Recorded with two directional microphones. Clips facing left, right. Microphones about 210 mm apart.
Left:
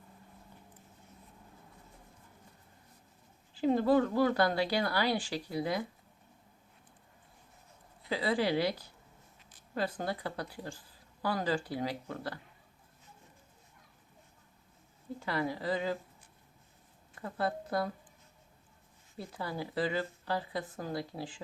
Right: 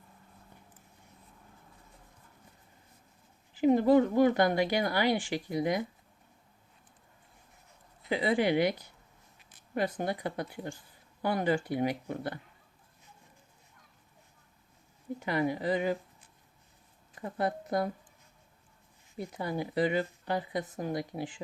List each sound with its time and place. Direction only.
3.6 s speech: 20° right (ahead or behind)
8.0 s speech: 20° right (ahead or behind)
15.2 s speech: 20° right (ahead or behind)
17.2 s speech: 20° right (ahead or behind)
19.1 s speech: 20° right (ahead or behind)